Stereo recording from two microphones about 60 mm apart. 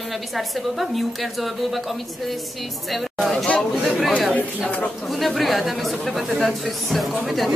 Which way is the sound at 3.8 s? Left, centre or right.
Centre.